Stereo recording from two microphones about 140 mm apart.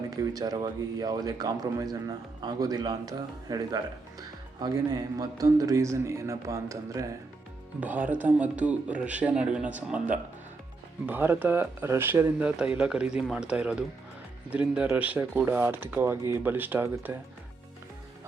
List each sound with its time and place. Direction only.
0.1 s speech: 25° right (ahead or behind)
7.8 s speech: 10° right (ahead or behind)